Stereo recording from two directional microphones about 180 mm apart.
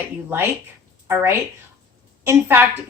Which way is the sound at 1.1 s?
15° right (ahead or behind).